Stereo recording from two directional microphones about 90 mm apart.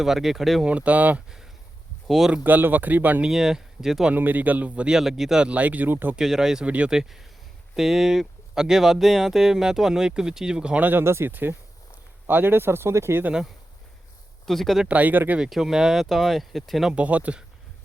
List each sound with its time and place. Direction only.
0.0 s speech: 5° right (ahead or behind)
0.6 s speech: 15° right (ahead or behind)
2.0 s speech: centre (ahead or behind)
2.3 s speech: 20° right (ahead or behind)
3.2 s speech: 5° right (ahead or behind)
4.1 s speech: 20° right (ahead or behind)
6.1 s speech: 5° right (ahead or behind); by 13.3 s 25° right (ahead or behind)
14.4 s speech: 5° left (ahead or behind)
14.8 s speech: 15° right (ahead or behind)
15.4 s speech: 5° right (ahead or behind)
16.9 s speech: 15° right (ahead or behind)